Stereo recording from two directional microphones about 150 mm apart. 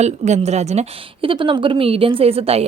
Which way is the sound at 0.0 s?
50° right (ahead or behind).